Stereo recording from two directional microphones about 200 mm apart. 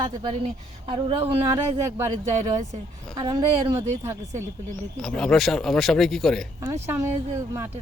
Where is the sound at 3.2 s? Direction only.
25° right (ahead or behind).